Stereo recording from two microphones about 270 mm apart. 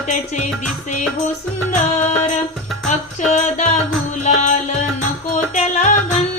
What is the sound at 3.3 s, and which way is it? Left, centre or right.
Music, left.